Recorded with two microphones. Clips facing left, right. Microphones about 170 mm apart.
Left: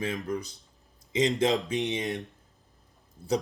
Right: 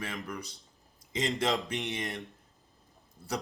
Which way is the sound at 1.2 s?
20° left (ahead or behind).